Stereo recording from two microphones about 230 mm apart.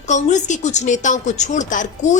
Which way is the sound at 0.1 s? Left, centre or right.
Left.